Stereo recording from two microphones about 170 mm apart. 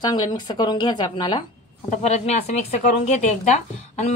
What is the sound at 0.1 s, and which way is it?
Speech, 25° left (ahead or behind).